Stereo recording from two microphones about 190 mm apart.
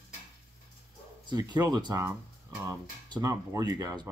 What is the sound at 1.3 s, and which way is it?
Speech, 20° right (ahead or behind).